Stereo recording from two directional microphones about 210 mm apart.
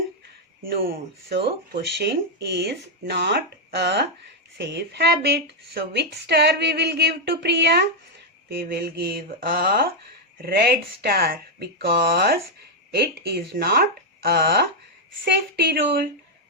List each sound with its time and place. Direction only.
0.6 s speech: 45° right (ahead or behind)